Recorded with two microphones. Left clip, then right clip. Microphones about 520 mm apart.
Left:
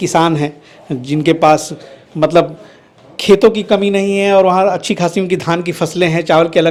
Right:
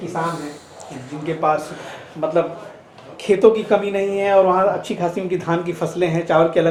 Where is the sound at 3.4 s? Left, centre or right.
Left.